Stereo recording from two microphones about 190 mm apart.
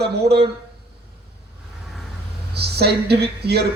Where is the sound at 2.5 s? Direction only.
60° right (ahead or behind).